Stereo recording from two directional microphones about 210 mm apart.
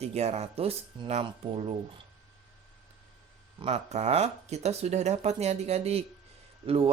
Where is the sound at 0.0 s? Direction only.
30° right (ahead or behind).